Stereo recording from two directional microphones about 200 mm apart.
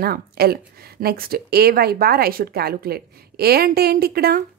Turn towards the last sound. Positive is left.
turn(degrees=-50)  # may be behind; listen again after turning